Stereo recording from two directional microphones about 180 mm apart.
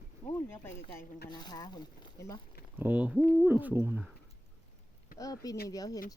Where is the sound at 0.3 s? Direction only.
15° left (ahead or behind).